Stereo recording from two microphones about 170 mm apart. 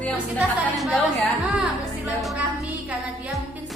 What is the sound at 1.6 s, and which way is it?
Music, 5° right (ahead or behind).